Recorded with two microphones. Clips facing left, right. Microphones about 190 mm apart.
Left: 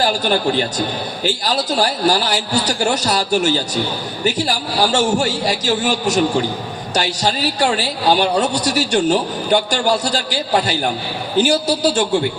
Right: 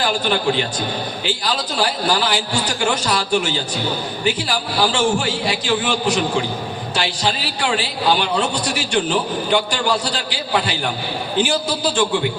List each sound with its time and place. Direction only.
0.0 s a man's voice: 40° left (ahead or behind)